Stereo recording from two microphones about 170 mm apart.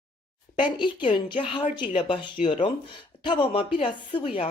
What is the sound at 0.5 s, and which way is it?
Speech, 30° left (ahead or behind).